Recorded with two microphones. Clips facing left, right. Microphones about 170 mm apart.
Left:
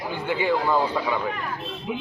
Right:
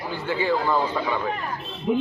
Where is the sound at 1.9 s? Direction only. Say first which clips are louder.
Right 9 dB; 45° right (ahead or behind).